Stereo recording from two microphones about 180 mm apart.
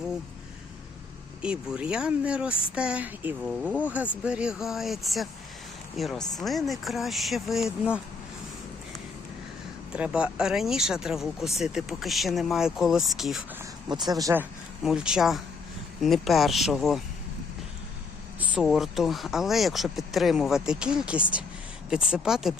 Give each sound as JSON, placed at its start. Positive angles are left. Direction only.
{"t": 1.7, "sound": "speech", "side_deg": -5}
{"t": 9.9, "sound": "speech", "side_deg": -5}
{"t": 13.6, "sound": "speech", "side_deg": -20}
{"t": 14.8, "sound": "speech", "side_deg": -5}
{"t": 18.3, "sound": "speech", "side_deg": -5}